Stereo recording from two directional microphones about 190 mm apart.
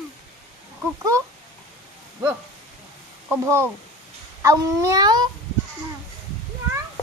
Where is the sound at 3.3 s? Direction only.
15° right (ahead or behind).